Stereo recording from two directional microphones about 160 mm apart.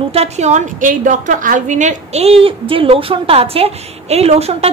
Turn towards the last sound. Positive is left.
turn(degrees=-40)  # may be behind; listen again after turning